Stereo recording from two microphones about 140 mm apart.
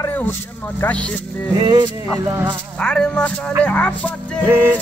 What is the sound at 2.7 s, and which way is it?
Speech, 5° left (ahead or behind).